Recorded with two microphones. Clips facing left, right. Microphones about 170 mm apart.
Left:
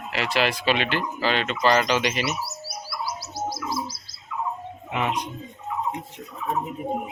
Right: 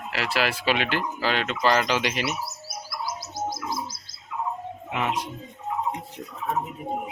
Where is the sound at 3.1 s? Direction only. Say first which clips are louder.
Right 1 dB; 50° right (ahead or behind).